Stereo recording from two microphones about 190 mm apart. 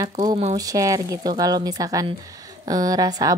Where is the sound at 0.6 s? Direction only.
15° right (ahead or behind).